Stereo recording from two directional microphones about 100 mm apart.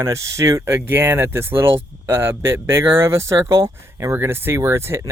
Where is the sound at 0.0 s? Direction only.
30° right (ahead or behind).